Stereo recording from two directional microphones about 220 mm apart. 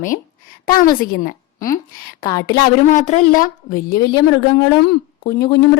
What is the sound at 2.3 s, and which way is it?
Speech, 15° left (ahead or behind).